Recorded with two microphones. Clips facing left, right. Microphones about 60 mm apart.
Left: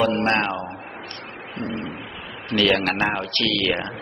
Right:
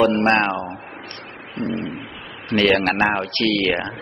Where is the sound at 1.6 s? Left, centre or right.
Right.